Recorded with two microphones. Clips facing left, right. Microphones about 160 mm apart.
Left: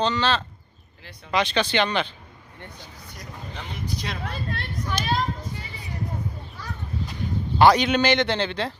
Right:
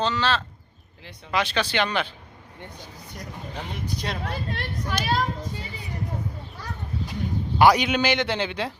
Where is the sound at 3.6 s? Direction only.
50° right (ahead or behind).